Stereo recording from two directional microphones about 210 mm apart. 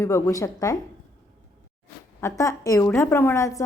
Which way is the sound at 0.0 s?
15° left (ahead or behind).